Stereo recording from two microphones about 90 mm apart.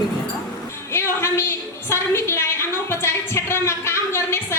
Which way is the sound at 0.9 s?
30° left (ahead or behind).